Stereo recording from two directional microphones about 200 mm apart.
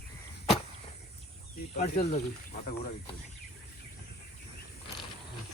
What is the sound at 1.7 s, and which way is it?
Speech, 35° left (ahead or behind).